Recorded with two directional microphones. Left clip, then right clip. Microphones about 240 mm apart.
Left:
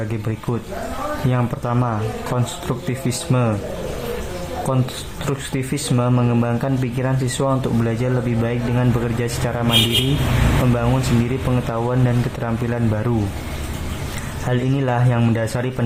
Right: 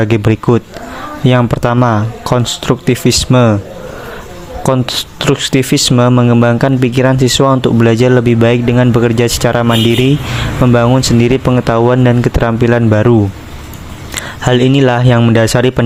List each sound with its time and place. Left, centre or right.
0.0 s speech: right
4.6 s speech: right
10.8 s speech: right
14.4 s speech: right